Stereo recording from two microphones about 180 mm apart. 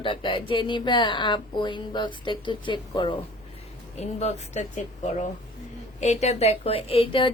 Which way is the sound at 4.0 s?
40° left (ahead or behind).